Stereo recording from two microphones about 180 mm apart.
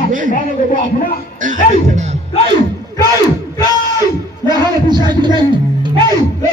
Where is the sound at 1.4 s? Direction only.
45° right (ahead or behind).